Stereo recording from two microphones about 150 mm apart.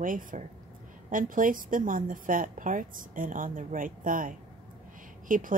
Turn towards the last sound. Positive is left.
turn(degrees=-65)  # may be behind; listen again after turning